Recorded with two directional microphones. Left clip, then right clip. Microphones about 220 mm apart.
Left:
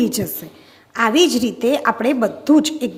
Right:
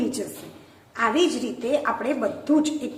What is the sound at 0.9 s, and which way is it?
A woman's voice, 50° left (ahead or behind).